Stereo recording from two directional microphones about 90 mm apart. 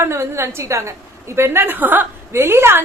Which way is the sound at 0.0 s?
30° right (ahead or behind).